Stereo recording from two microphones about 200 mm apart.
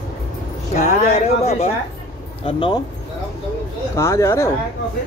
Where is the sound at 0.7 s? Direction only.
35° left (ahead or behind).